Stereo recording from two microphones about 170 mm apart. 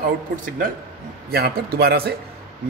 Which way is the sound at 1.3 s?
65° right (ahead or behind).